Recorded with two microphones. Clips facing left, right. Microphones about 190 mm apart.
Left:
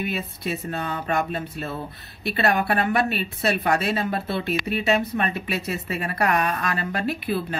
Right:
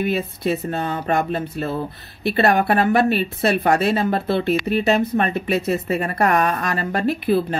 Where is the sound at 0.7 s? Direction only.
30° right (ahead or behind).